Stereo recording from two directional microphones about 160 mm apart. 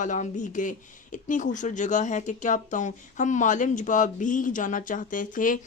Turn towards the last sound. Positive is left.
turn(degrees=55)  # may be behind; listen again after turning